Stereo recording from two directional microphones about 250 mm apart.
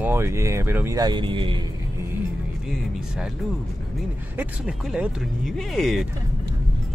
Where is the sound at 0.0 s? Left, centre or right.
Centre.